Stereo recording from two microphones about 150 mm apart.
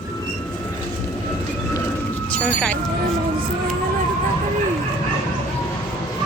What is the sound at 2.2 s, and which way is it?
Speech, 5° left (ahead or behind).